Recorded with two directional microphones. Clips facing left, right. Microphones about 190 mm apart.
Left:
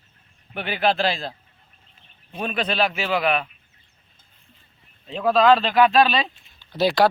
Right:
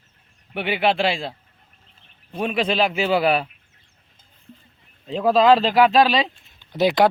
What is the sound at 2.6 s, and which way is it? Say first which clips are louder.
Speech: right 2 dB; 25° right (ahead or behind).